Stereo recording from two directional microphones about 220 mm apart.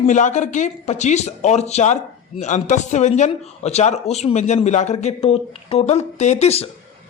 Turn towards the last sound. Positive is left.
turn(degrees=30)  # may be behind; listen again after turning